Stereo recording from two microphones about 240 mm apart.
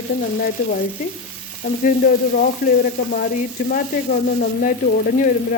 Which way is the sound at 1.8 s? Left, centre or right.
Left.